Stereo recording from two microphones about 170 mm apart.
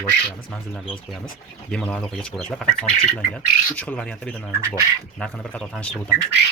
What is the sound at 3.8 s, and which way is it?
Speech, 5° left (ahead or behind).